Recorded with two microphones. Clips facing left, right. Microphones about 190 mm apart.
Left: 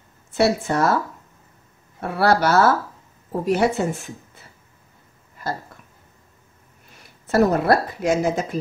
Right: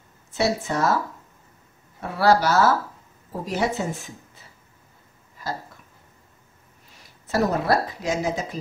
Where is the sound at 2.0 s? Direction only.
60° left (ahead or behind).